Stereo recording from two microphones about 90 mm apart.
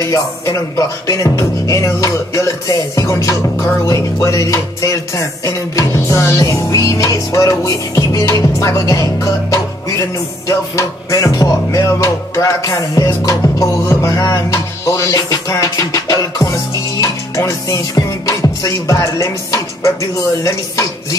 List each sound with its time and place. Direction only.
0.0 s music: 35° left (ahead or behind)